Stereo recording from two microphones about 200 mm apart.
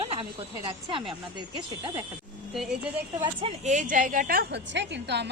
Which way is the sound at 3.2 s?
30° right (ahead or behind).